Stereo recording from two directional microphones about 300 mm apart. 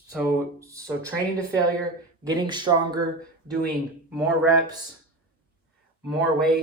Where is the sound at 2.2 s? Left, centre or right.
Centre.